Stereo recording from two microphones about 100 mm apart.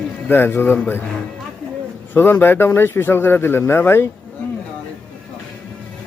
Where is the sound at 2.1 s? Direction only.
20° left (ahead or behind).